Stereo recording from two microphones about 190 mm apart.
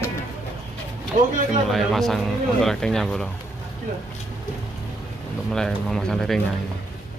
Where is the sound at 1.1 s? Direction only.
40° right (ahead or behind).